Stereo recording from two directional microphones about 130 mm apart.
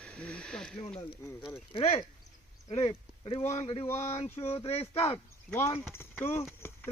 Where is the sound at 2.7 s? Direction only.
50° left (ahead or behind).